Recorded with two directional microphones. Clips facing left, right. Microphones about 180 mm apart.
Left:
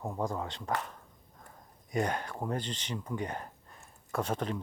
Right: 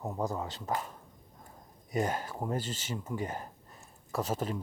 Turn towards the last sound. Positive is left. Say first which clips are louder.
# even
turn(degrees=-5)  # may be behind; listen again after turning